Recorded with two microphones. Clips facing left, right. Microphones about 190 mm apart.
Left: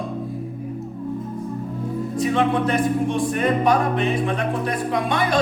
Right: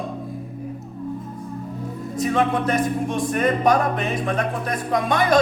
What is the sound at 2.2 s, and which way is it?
Music, 45° right (ahead or behind).